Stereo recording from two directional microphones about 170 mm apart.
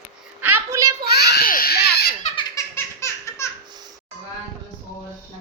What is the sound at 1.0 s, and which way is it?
Baby cry, 70° left (ahead or behind).